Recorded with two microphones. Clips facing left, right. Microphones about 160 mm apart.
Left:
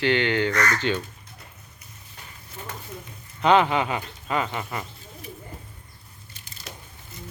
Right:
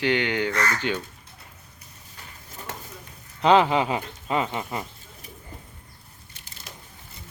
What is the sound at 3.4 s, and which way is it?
Speech, 25° right (ahead or behind).